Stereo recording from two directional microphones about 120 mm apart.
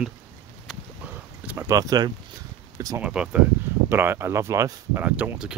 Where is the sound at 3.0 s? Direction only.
10° right (ahead or behind).